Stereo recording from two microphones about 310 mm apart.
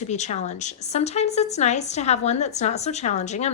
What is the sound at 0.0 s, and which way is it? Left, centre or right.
A woman's voice, left.